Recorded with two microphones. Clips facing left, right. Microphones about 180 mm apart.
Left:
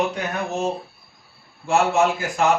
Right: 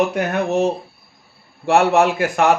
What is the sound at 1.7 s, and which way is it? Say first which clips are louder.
Speech: right 4 dB; 65° right (ahead or behind).